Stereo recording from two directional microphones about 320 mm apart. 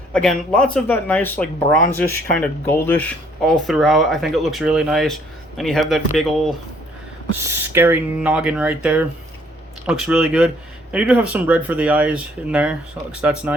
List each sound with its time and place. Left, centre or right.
0.1 s speech: centre